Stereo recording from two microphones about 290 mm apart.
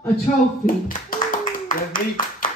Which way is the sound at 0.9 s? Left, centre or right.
Left.